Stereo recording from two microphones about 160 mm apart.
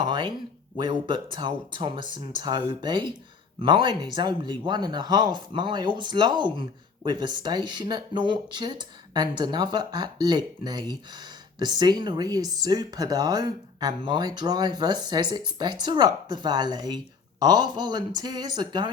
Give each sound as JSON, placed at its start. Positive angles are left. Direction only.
{"t": 0.0, "sound": "speech", "side_deg": -30}